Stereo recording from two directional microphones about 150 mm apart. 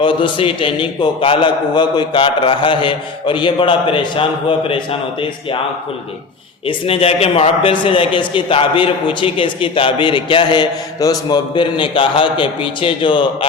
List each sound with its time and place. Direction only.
0.0 s a man's voice: 35° left (ahead or behind)
6.7 s a man's voice: 40° left (ahead or behind)